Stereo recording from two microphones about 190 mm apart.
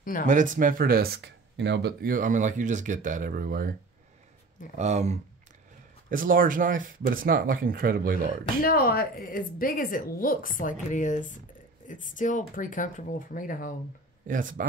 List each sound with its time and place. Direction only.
0.3 s speech: 45° right (ahead or behind)
4.7 s speech: 35° right (ahead or behind)
6.0 s speech: 45° right (ahead or behind)
8.6 s a woman's voice: 50° left (ahead or behind)
14.2 s speech: 45° right (ahead or behind)